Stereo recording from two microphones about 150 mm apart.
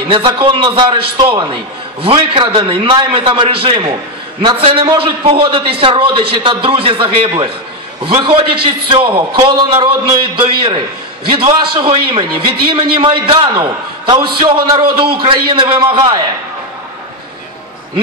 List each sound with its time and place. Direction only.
0.1 s a man's voice: 35° right (ahead or behind)